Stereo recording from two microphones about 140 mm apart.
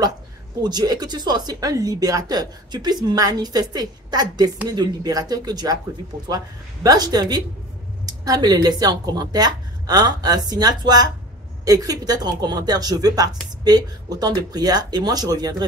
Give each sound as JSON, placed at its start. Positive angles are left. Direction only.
{"t": 0.6, "sound": "a woman's voice", "side_deg": -30}